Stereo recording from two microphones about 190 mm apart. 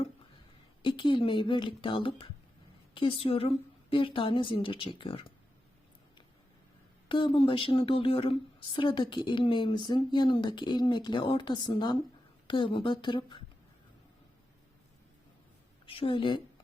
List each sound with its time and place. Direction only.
0.8 s a woman's voice: 25° left (ahead or behind)
7.1 s a woman's voice: 25° left (ahead or behind)
15.9 s a woman's voice: 30° left (ahead or behind)